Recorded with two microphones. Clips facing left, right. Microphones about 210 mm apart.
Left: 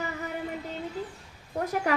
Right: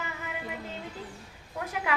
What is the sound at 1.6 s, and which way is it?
Speech, 40° left (ahead or behind).